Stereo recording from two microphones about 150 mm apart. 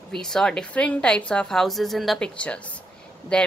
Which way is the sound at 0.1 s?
5° left (ahead or behind).